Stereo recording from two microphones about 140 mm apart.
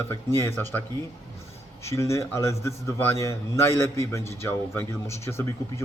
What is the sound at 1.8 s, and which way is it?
A man's voice, 20° left (ahead or behind).